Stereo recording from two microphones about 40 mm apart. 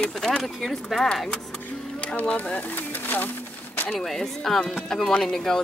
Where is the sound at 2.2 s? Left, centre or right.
Left.